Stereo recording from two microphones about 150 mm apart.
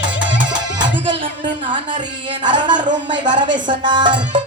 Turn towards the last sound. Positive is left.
turn(degrees=-30)  # may be behind; listen again after turning